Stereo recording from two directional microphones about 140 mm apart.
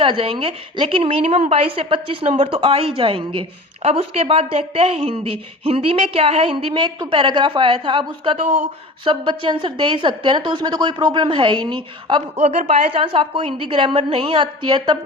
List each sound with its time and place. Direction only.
0.0 s a woman's voice: 40° right (ahead or behind)
12.4 s a woman's voice: 50° right (ahead or behind); by 14.9 s 35° right (ahead or behind)